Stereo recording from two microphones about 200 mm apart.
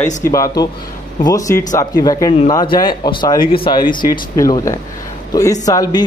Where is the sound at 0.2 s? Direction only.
15° left (ahead or behind).